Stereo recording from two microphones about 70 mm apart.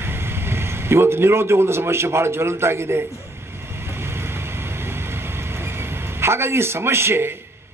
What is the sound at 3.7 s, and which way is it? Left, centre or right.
Vehicle, right.